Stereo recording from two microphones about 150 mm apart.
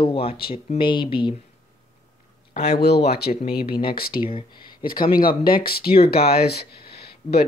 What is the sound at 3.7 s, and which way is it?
Speech, 30° left (ahead or behind).